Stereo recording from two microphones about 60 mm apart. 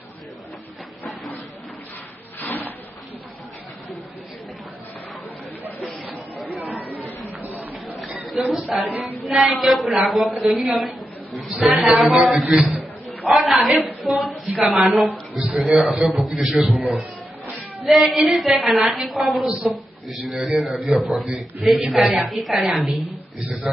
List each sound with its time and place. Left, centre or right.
6.4 s chatter: centre
7.2 s a sound: right
7.7 s chatter: centre
8.3 s a woman's voice: centre
17.8 s speech: centre